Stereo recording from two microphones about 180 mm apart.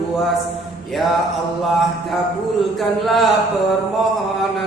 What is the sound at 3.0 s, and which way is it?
Chant, centre (ahead or behind).